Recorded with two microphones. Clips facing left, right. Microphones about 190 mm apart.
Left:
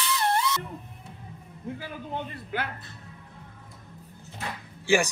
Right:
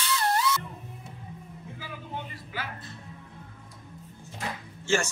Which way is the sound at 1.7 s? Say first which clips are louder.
Left 3 dB; 55° left (ahead or behind).